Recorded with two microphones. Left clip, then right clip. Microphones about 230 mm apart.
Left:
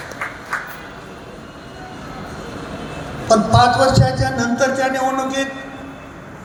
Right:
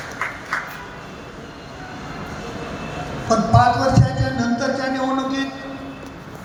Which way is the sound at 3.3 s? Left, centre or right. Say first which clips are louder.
Left 3 dB; left.